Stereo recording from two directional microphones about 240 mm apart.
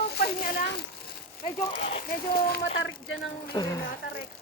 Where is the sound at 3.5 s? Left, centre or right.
Centre.